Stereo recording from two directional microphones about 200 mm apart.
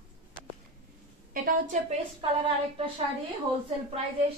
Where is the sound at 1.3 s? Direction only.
45° right (ahead or behind).